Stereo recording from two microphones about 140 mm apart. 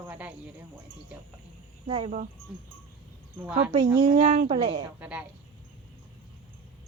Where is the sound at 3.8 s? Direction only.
30° right (ahead or behind).